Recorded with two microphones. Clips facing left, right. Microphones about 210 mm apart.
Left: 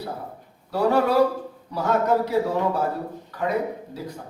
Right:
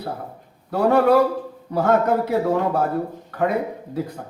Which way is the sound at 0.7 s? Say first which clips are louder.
Right 4 dB; 55° right (ahead or behind).